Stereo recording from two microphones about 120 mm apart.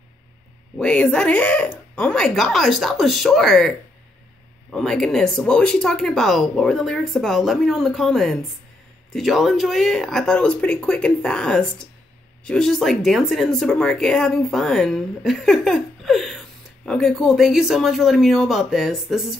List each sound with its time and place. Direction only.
0.7 s speech: 10° left (ahead or behind)